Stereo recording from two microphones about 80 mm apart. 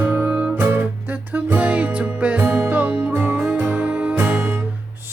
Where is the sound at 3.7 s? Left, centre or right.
Centre.